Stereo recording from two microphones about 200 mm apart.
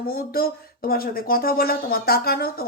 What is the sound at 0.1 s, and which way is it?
Speech, 50° left (ahead or behind).